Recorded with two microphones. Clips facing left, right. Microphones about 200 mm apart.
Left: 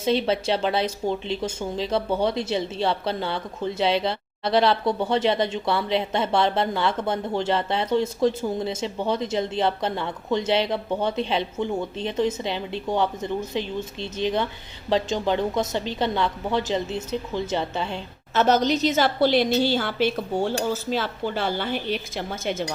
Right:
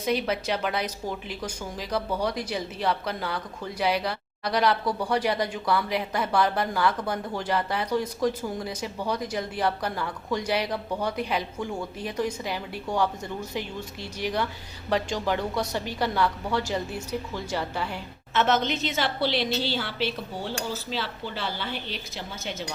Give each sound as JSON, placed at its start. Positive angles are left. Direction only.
{"t": 0.0, "sound": "speech", "side_deg": 30}
{"t": 18.3, "sound": "a woman's voice", "side_deg": 40}